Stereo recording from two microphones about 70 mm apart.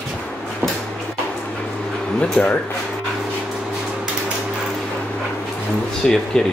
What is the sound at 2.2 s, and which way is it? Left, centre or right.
Speech, centre.